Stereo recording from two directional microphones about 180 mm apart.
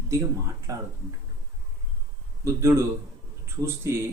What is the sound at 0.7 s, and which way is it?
Speech, 20° right (ahead or behind).